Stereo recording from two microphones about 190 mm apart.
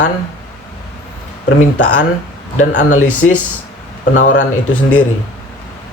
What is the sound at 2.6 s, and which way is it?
Speech, 40° left (ahead or behind).